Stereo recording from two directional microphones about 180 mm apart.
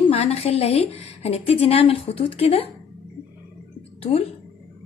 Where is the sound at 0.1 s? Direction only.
35° left (ahead or behind).